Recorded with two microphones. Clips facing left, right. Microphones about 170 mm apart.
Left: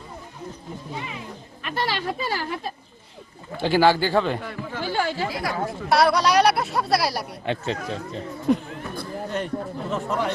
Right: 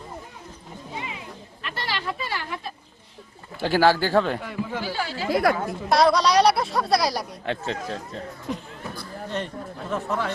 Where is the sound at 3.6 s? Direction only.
5° right (ahead or behind).